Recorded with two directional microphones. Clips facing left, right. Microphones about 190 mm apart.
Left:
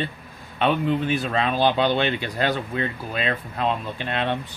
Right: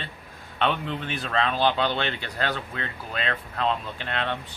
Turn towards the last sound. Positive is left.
turn(degrees=15)  # may be behind; listen again after turning